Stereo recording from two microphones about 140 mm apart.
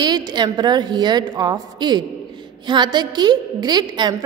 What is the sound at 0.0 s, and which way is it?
A woman's voice, 30° right (ahead or behind).